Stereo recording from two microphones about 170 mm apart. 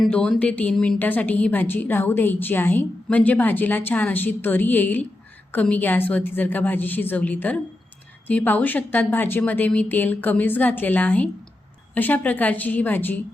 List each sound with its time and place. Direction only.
0.0 s a woman's voice: 5° left (ahead or behind)